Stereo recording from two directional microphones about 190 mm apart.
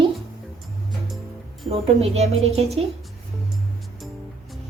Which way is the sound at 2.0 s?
35° right (ahead or behind).